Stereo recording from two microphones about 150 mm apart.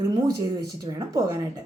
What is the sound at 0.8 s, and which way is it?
Speech, 25° right (ahead or behind).